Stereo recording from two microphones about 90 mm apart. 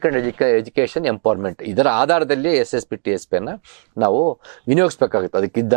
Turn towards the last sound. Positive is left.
turn(degrees=-20)  # may be behind; listen again after turning